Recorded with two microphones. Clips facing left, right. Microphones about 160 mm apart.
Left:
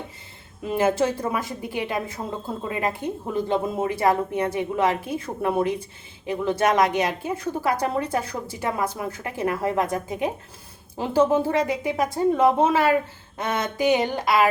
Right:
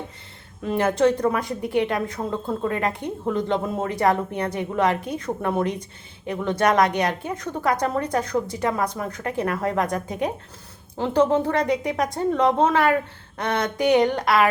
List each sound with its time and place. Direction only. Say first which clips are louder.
0.6 s a woman's voice: right 2 dB; 5° left (ahead or behind)